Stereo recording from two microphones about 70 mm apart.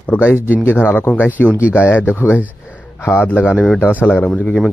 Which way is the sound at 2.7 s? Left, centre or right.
Left.